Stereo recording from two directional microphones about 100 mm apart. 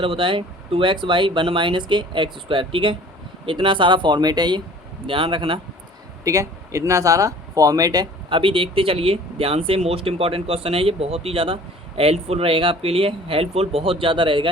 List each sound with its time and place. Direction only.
0.0 s speech: 60° right (ahead or behind)
5.0 s speech: 60° right (ahead or behind)
6.2 s speech: 30° right (ahead or behind)
8.3 s speech: 60° right (ahead or behind)